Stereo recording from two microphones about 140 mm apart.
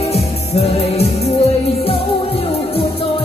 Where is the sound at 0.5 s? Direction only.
45° left (ahead or behind).